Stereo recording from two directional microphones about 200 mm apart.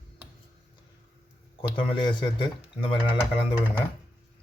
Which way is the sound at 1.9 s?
25° left (ahead or behind).